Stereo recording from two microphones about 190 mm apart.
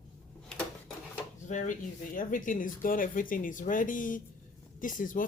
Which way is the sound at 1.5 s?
40° left (ahead or behind).